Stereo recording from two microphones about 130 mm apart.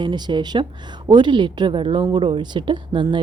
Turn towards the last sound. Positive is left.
turn(degrees=-40)  # may be behind; listen again after turning